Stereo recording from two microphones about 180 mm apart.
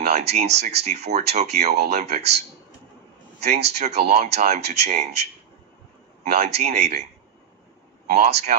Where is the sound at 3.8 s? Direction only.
35° right (ahead or behind).